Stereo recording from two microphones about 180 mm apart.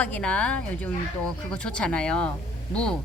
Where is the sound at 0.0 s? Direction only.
5° left (ahead or behind).